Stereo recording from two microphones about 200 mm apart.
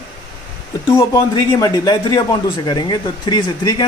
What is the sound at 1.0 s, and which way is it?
Speech, 20° left (ahead or behind).